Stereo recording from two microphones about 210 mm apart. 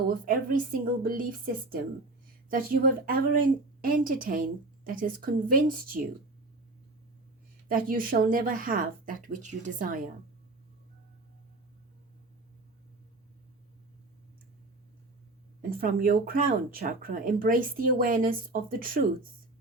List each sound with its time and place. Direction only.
0.1 s speech: 40° right (ahead or behind)
2.5 s speech: 45° right (ahead or behind)
7.7 s speech: 40° right (ahead or behind)
15.7 s speech: 45° right (ahead or behind)